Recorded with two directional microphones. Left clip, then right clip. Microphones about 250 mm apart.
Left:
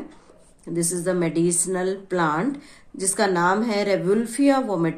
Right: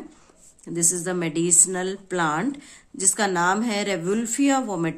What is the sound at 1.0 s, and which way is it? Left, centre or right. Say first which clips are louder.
Speech: left 4 dB; right.